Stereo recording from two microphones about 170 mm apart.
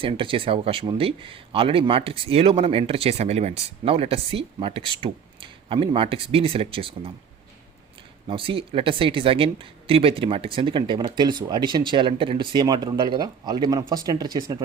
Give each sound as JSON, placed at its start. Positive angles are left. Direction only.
{"t": 0.0, "sound": "speech", "side_deg": -30}
{"t": 8.3, "sound": "speech", "side_deg": -30}